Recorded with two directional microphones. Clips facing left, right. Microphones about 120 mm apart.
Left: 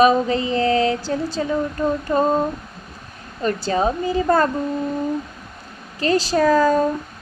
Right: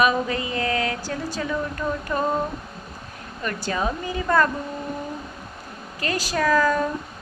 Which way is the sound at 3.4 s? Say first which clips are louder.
Left 6 dB; 30° left (ahead or behind).